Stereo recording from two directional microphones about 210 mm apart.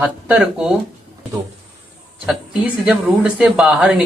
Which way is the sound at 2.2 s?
5° right (ahead or behind).